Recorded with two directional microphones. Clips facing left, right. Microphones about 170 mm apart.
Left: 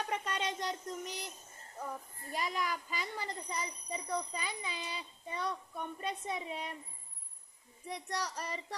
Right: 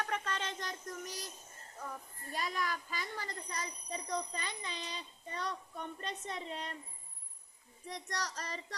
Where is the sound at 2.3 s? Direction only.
15° left (ahead or behind).